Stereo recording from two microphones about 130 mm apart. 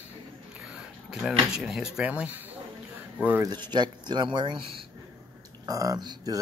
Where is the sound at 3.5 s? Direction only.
35° right (ahead or behind).